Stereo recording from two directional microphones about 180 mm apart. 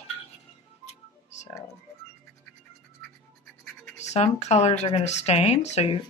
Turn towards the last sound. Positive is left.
turn(degrees=35)  # may be behind; listen again after turning